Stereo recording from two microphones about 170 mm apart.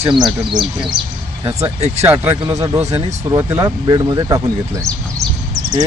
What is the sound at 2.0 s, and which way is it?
Speech, 15° right (ahead or behind).